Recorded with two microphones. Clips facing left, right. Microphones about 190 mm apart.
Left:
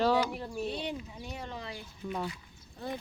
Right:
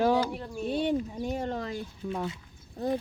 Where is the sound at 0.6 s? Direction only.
50° right (ahead or behind).